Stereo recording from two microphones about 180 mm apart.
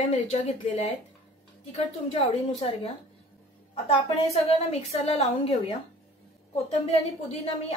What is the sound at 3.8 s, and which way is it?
A woman's voice, 35° left (ahead or behind).